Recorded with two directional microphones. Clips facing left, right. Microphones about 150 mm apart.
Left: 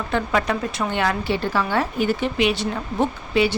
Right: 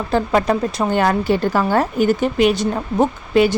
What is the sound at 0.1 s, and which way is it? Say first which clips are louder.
Speech: right 5 dB; 35° right (ahead or behind).